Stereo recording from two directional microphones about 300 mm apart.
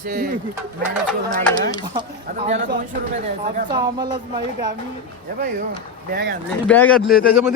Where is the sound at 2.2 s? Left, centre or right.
Right.